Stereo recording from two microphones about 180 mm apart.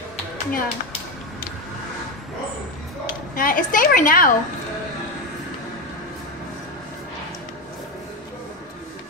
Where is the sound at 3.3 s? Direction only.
50° left (ahead or behind).